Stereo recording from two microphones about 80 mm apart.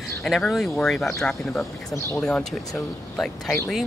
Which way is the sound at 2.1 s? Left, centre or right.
Centre.